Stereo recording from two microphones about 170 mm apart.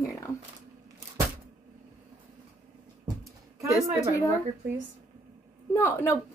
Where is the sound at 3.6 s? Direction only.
20° right (ahead or behind).